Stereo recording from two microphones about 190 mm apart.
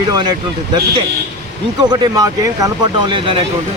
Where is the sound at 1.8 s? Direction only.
20° right (ahead or behind).